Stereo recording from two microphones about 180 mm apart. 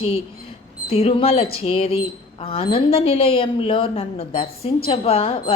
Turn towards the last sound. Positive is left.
turn(degrees=30)  # may be behind; listen again after turning